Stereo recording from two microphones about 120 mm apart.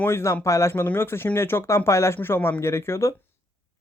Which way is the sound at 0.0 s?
20° left (ahead or behind).